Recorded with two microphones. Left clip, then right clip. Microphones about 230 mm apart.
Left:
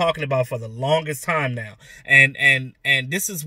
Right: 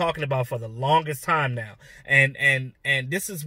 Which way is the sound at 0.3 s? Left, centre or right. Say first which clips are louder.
Left 5 dB; centre.